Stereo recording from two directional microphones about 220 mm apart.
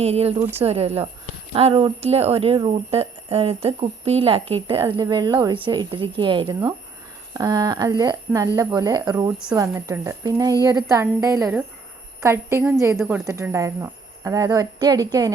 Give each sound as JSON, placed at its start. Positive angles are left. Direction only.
{"t": 0.0, "sound": "speech", "side_deg": -30}